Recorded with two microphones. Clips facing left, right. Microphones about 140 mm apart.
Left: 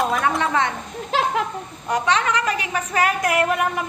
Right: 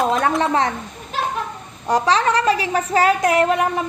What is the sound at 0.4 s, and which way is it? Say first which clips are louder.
Speech: right 3 dB; 35° right (ahead or behind).